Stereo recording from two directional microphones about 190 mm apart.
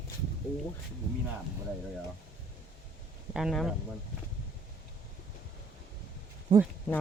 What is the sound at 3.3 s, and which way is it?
Speech, centre (ahead or behind).